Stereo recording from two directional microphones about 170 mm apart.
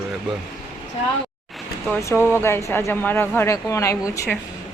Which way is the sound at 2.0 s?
15° left (ahead or behind).